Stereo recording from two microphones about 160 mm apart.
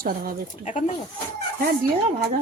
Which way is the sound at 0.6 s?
45° left (ahead or behind).